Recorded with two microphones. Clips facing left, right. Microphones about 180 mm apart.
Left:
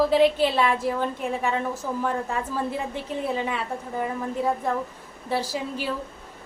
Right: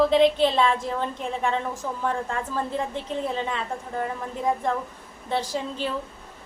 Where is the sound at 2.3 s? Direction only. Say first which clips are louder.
Left 1 dB; 10° left (ahead or behind).